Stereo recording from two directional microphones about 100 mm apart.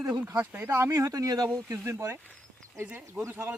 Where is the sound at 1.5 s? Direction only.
25° right (ahead or behind).